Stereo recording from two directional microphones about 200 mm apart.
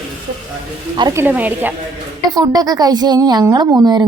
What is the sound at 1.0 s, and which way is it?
A woman's voice, 15° right (ahead or behind).